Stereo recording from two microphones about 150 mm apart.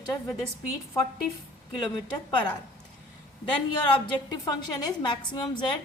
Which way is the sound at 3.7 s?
30° left (ahead or behind).